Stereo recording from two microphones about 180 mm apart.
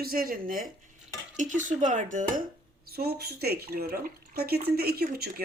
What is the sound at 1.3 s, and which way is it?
Speech, 45° right (ahead or behind).